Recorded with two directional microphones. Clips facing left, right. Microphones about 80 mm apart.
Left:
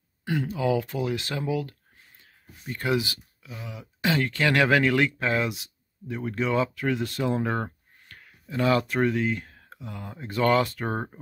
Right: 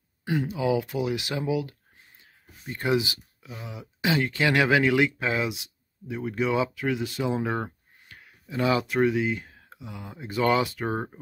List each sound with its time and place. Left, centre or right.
0.2 s speech: centre